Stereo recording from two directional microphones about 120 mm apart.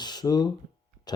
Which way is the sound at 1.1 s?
35° left (ahead or behind).